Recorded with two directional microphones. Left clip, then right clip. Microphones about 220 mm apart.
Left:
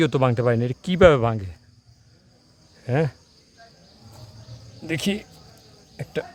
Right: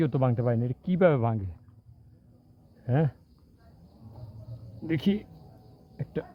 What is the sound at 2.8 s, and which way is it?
Speech, 10° left (ahead or behind).